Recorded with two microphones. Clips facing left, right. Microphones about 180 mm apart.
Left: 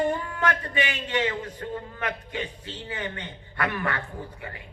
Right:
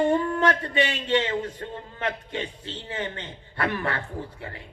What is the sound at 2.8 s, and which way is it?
A man's voice, 30° right (ahead or behind).